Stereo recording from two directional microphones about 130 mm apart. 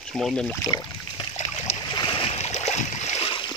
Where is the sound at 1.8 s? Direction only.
35° left (ahead or behind).